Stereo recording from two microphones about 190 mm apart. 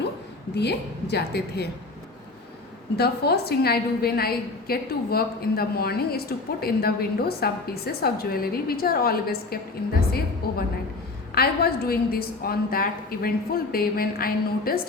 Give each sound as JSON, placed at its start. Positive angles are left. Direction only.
{"t": 0.5, "sound": "a woman's voice", "side_deg": 60}
{"t": 2.9, "sound": "a woman's voice", "side_deg": 55}